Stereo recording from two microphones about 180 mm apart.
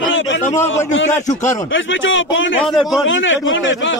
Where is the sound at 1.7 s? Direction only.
90° left.